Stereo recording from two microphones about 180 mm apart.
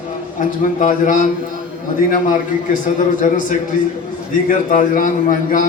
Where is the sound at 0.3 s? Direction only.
45° left (ahead or behind).